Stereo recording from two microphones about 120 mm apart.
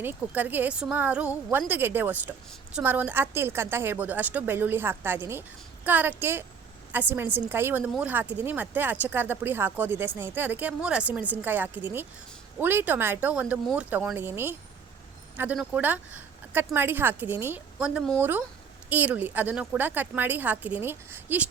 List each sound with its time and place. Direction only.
0.0 s a woman's voice: 15° right (ahead or behind)